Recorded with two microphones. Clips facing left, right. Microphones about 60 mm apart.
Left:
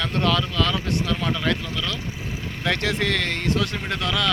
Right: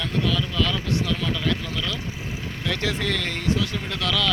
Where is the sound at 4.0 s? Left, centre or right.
Left.